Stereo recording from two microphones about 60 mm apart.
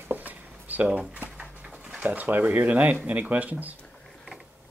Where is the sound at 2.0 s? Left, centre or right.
Right.